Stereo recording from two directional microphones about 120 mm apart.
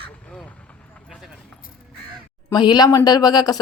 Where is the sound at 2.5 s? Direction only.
35° left (ahead or behind).